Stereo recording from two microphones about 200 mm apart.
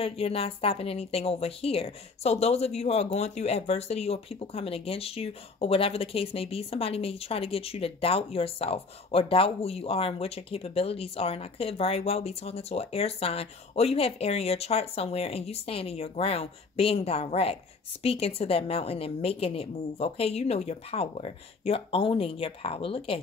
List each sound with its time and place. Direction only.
0.0 s a woman's voice: 30° left (ahead or behind)